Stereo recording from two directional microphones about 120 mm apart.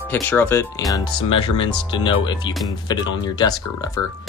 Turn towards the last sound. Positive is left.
turn(degrees=30)  # may be behind; listen again after turning